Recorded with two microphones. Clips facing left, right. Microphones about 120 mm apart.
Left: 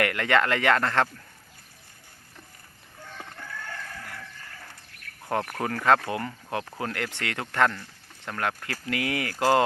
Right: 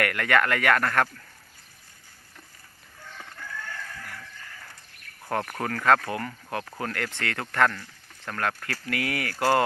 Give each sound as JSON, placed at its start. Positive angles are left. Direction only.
{"t": 0.0, "sound": "speech", "side_deg": 20}
{"t": 5.3, "sound": "speech", "side_deg": 10}